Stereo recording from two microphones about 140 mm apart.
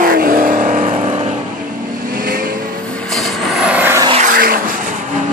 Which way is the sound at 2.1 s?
90° right.